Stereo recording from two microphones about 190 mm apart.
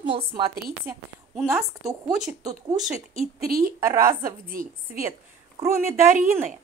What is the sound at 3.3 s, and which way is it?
Speech, 50° right (ahead or behind).